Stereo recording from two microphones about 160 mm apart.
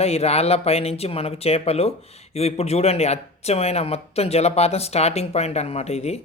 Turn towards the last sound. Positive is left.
turn(degrees=45)  # may be behind; listen again after turning